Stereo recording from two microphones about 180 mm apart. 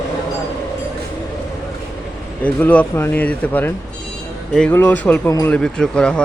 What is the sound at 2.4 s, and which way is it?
Speech, 10° left (ahead or behind).